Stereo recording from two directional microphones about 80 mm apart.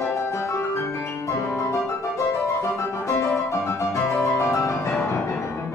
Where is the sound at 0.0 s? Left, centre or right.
Left.